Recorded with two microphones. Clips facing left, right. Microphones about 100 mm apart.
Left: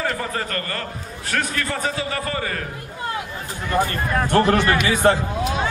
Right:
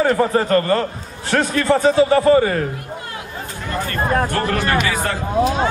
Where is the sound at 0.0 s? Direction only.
30° right (ahead or behind).